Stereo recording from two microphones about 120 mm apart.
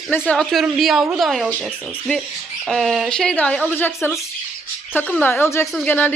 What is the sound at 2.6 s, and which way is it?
Speech, centre (ahead or behind).